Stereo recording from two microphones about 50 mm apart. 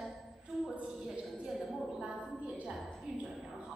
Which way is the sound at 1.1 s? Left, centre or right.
Right.